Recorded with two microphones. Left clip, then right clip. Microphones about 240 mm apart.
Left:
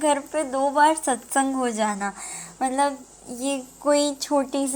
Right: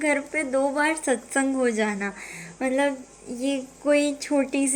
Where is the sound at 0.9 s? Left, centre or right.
Left.